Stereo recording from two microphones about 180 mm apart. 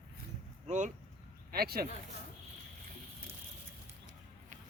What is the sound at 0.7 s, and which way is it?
Speech, 40° right (ahead or behind).